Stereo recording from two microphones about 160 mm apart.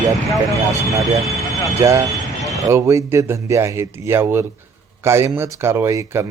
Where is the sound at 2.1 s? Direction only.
Centre (ahead or behind).